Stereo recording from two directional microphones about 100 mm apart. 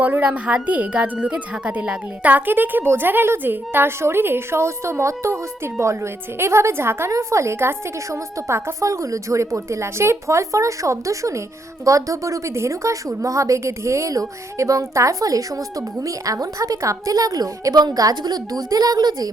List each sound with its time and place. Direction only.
0.0 s a woman's voice: 15° right (ahead or behind); by 19.3 s 40° right (ahead or behind)